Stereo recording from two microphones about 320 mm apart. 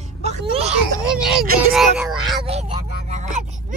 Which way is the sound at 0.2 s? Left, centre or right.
Centre.